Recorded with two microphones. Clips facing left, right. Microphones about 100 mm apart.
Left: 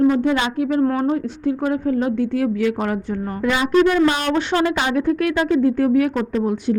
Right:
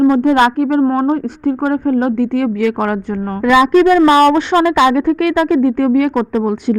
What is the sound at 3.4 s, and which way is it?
Speech, 90° right.